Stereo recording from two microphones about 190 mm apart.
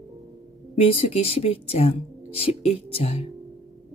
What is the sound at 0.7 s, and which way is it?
Speech, 30° left (ahead or behind).